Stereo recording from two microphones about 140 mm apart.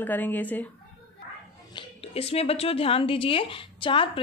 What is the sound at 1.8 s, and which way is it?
Speech, 45° left (ahead or behind).